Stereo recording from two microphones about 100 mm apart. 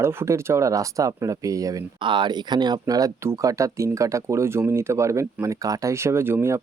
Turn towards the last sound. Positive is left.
turn(degrees=-25)  # may be behind; listen again after turning